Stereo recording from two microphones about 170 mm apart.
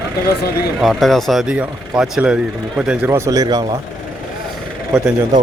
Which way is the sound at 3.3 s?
20° right (ahead or behind).